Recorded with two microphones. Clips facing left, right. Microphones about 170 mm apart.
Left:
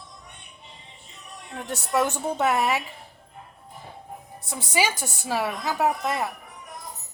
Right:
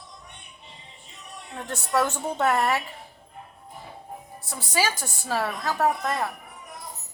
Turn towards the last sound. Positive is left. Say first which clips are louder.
# even
turn(degrees=10)  # may be behind; listen again after turning